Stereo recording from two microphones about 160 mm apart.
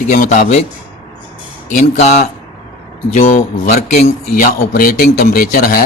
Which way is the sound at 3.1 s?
50° left (ahead or behind).